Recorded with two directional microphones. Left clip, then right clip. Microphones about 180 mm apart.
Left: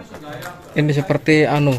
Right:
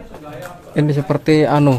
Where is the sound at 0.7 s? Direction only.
15° right (ahead or behind).